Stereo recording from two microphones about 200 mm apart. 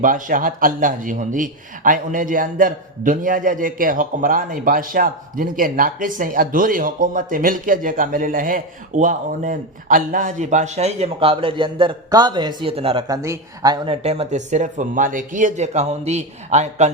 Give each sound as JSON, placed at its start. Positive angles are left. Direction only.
{"t": 0.0, "sound": "a man's voice", "side_deg": -45}
{"t": 13.1, "sound": "speech", "side_deg": -15}